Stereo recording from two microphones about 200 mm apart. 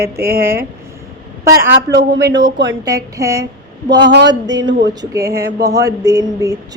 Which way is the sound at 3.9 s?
60° right (ahead or behind).